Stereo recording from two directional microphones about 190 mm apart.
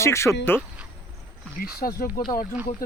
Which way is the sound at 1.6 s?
50° left (ahead or behind).